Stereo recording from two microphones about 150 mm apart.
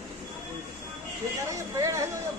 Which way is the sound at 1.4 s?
20° right (ahead or behind).